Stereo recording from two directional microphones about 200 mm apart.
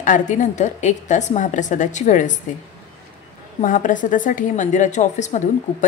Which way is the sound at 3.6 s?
40° left (ahead or behind).